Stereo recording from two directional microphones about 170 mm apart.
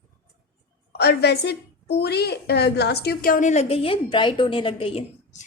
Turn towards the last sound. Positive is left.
turn(degrees=35)  # may be behind; listen again after turning